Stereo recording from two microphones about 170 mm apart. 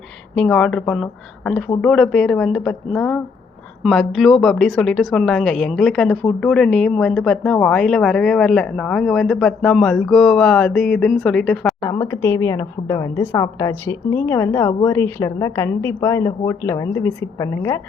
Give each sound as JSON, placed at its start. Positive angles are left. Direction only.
{"t": 0.3, "sound": "a woman's voice", "side_deg": 5}
{"t": 11.8, "sound": "a woman's voice", "side_deg": 15}